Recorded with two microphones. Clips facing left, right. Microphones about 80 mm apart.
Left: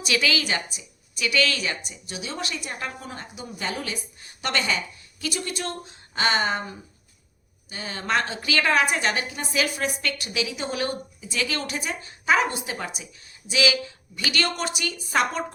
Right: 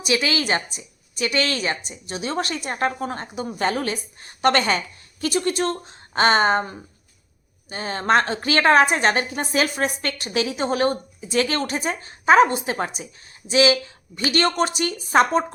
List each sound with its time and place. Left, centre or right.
0.0 s a woman's voice: right